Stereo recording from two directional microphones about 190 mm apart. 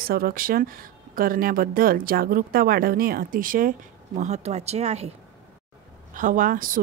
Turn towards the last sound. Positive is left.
turn(degrees=-45)  # may be behind; listen again after turning